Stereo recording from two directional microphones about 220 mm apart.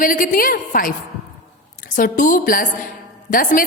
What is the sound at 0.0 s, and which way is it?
Speech, 40° left (ahead or behind).